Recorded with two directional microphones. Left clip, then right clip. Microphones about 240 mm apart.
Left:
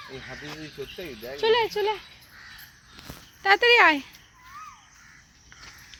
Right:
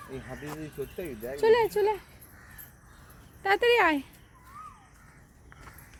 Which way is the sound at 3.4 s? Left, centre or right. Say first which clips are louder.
Left 5 dB; left.